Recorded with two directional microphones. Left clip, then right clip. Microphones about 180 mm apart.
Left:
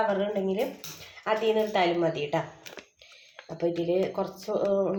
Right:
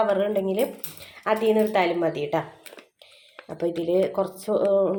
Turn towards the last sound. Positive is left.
turn(degrees=-40)  # may be behind; listen again after turning